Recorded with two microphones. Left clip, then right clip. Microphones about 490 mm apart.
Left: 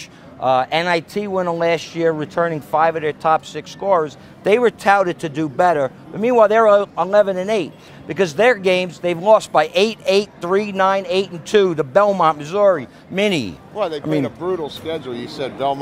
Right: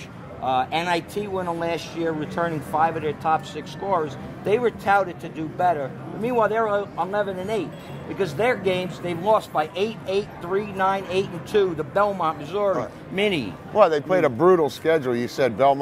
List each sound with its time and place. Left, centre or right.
0.4 s speech: left
13.7 s speech: right
14.2 s speech: right